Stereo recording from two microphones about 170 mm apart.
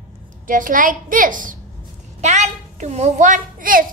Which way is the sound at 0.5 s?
50° right (ahead or behind).